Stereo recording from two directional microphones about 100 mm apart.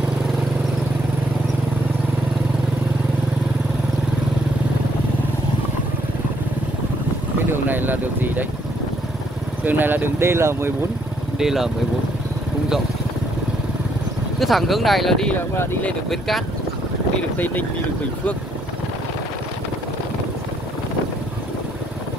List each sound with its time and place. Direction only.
7.5 s speech: 20° right (ahead or behind)
9.7 s speech: 20° right (ahead or behind)
11.3 s speech: 5° right (ahead or behind)
14.4 s speech: centre (ahead or behind)
15.5 s speech: 25° left (ahead or behind)
16.1 s speech: centre (ahead or behind)